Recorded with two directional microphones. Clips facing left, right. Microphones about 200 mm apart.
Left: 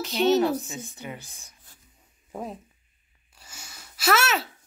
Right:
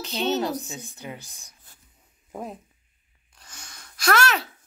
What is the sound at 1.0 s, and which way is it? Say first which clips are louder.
Speech: right 3 dB; 15° right (ahead or behind).